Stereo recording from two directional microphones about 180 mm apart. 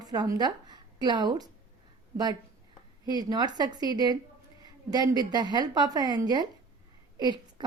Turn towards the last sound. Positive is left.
turn(degrees=-25)  # may be behind; listen again after turning